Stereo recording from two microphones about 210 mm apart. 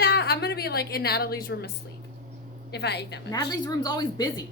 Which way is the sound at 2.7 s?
55° left (ahead or behind).